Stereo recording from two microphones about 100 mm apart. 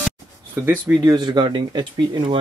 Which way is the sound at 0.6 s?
25° right (ahead or behind).